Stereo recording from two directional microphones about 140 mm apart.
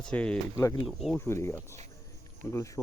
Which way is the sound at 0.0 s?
10° left (ahead or behind).